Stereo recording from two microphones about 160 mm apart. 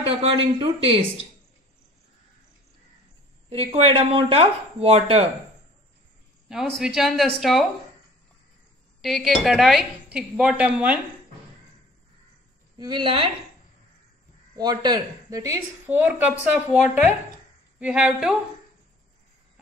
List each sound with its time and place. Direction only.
0.2 s speech: 35° right (ahead or behind)
3.4 s speech: 40° right (ahead or behind)
6.8 s a woman's voice: centre (ahead or behind)
9.0 s a woman's voice: centre (ahead or behind)
12.7 s speech: 30° right (ahead or behind)
14.6 s a woman's voice: 25° right (ahead or behind); by 18.3 s 5° right (ahead or behind)